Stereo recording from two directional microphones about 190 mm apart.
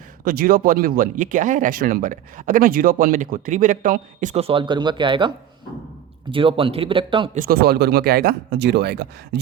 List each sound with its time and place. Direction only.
0.3 s speech: 50° right (ahead or behind); by 5.3 s 25° right (ahead or behind)
6.3 s speech: 30° right (ahead or behind)
7.3 s speech: 55° right (ahead or behind)